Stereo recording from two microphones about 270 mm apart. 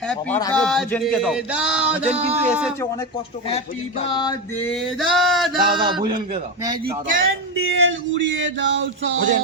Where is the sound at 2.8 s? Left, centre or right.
Centre.